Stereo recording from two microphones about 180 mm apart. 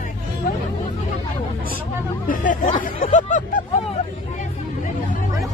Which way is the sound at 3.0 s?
45° left (ahead or behind).